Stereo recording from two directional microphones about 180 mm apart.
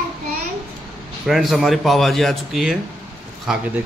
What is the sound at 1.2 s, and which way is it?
Speech, centre (ahead or behind).